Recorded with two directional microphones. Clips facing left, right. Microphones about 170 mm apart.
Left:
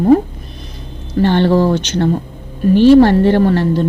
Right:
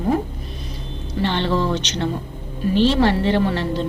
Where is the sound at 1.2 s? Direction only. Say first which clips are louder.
Left 9 dB; 45° left (ahead or behind).